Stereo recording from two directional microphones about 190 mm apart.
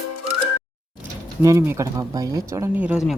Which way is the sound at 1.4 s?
15° right (ahead or behind).